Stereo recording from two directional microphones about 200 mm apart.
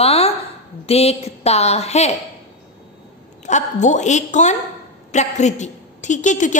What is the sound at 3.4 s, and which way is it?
A woman's voice, 35° left (ahead or behind).